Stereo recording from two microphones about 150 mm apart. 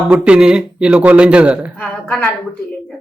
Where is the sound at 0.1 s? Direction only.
5° right (ahead or behind).